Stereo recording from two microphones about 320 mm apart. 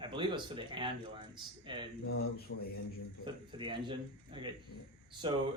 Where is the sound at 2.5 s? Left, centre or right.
Left.